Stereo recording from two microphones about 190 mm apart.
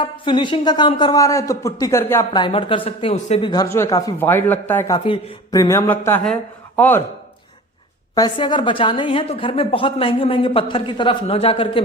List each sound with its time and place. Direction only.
0.0 s a woman's voice: 25° left (ahead or behind)
2.4 s a woman's voice: 30° left (ahead or behind)
3.5 s speech: 15° left (ahead or behind)
4.9 s a man's voice: 25° left (ahead or behind); by 7.0 s 10° left (ahead or behind)
8.1 s a woman's voice: 20° left (ahead or behind)